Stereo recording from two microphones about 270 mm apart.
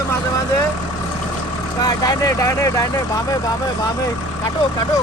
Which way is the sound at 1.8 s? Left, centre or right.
Centre.